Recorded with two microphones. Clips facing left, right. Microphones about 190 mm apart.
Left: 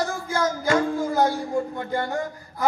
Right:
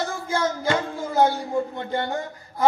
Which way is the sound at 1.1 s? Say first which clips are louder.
Right 5 dB; 25° right (ahead or behind).